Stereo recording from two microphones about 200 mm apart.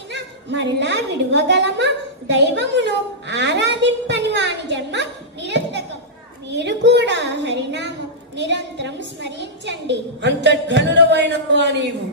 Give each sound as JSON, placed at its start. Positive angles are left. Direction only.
{"t": 0.1, "sound": "a woman's voice", "side_deg": -60}